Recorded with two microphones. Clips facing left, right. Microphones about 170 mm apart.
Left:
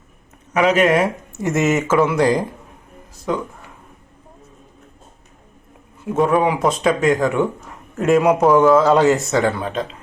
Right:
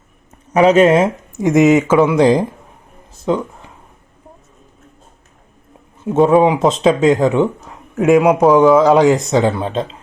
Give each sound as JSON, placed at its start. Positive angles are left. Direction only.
{"t": 0.5, "sound": "speech", "side_deg": -30}
{"t": 6.1, "sound": "speech", "side_deg": -25}
{"t": 7.9, "sound": "speech", "side_deg": -10}